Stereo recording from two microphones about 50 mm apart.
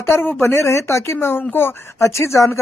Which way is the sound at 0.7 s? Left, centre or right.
Left.